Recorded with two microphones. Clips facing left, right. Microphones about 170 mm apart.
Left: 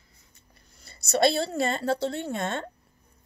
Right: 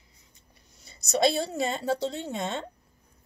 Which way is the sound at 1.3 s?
15° right (ahead or behind).